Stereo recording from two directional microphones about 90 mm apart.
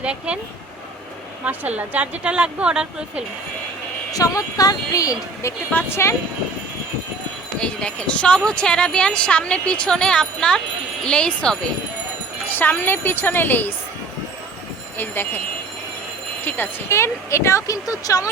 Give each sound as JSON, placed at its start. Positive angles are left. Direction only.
{"t": 0.0, "sound": "speech", "side_deg": -10}
{"t": 1.5, "sound": "speech", "side_deg": -15}
{"t": 4.1, "sound": "speech", "side_deg": 40}
{"t": 5.7, "sound": "a woman's voice", "side_deg": 30}
{"t": 7.6, "sound": "speech", "side_deg": 10}
{"t": 12.5, "sound": "a woman's voice", "side_deg": 20}
{"t": 14.9, "sound": "a woman's voice", "side_deg": 25}
{"t": 16.4, "sound": "speech", "side_deg": 20}
{"t": 16.9, "sound": "speech", "side_deg": 30}